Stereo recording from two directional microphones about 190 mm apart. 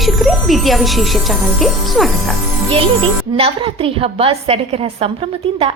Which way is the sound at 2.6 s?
30° right (ahead or behind).